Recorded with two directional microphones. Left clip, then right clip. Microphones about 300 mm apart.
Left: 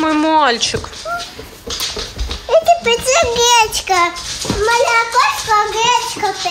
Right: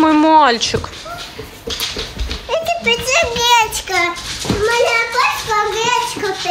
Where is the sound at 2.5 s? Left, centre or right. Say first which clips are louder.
Left 5 dB; left.